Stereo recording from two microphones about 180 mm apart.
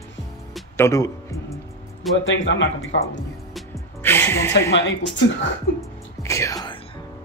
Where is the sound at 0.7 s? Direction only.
15° left (ahead or behind).